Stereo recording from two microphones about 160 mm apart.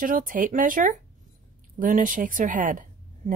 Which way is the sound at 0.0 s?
60° right (ahead or behind).